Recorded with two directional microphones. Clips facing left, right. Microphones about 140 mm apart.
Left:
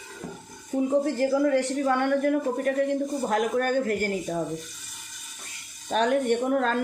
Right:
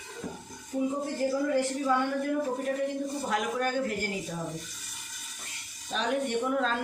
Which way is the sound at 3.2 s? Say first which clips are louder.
Left 5 dB; 50° left (ahead or behind).